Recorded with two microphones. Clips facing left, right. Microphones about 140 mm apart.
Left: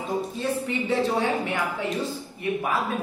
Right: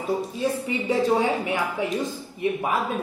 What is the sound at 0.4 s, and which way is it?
Speech, 10° right (ahead or behind).